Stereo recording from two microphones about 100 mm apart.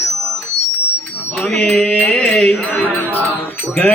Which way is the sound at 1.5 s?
10° left (ahead or behind).